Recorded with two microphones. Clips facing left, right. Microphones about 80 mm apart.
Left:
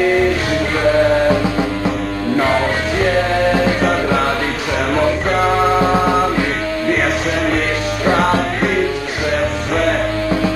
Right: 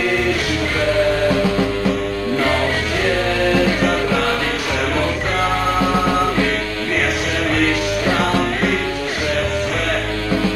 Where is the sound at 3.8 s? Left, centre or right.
Centre.